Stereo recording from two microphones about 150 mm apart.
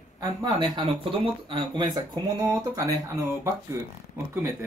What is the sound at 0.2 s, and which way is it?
Speech, 25° right (ahead or behind).